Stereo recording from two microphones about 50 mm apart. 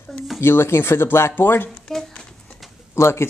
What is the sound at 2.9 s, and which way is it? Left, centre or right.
Speech, left.